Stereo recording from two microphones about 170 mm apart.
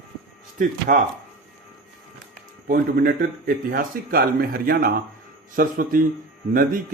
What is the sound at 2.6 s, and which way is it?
Speech, 60° right (ahead or behind).